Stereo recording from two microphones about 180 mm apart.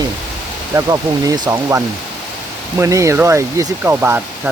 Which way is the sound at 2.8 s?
15° right (ahead or behind).